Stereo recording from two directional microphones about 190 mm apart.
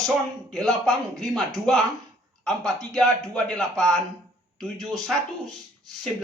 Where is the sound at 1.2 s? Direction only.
Centre (ahead or behind).